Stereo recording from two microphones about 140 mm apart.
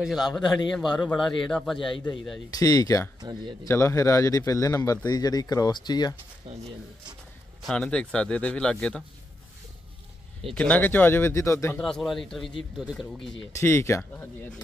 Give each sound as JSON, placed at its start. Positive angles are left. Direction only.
{"t": 0.0, "sound": "a man's voice", "side_deg": 0}
{"t": 2.5, "sound": "a man's voice", "side_deg": 25}
{"t": 3.2, "sound": "speech", "side_deg": -30}
{"t": 3.6, "sound": "a man's voice", "side_deg": 20}
{"t": 6.5, "sound": "speech", "side_deg": -45}
{"t": 7.6, "sound": "a man's voice", "side_deg": 5}
{"t": 10.5, "sound": "a man's voice", "side_deg": 10}
{"t": 11.8, "sound": "a man's voice", "side_deg": 5}
{"t": 13.6, "sound": "a man's voice", "side_deg": 15}